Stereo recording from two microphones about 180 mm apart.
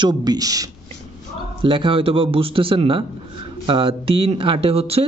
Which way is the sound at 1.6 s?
30° right (ahead or behind).